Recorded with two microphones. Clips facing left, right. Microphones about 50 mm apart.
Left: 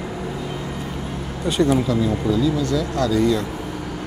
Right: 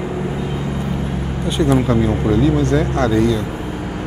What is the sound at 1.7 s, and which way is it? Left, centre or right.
Speech, right.